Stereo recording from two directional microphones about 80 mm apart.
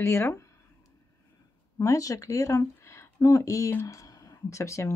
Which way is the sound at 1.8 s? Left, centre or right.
Left.